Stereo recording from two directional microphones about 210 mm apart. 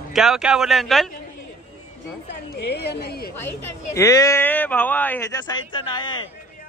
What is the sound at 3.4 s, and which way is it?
Speech, 10° left (ahead or behind).